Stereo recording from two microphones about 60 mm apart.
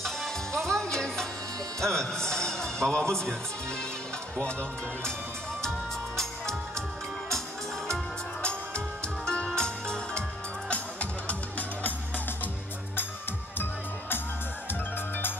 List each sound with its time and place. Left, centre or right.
0.0 s music: centre
5.6 s music: centre
8.4 s music: centre
13.6 s music: left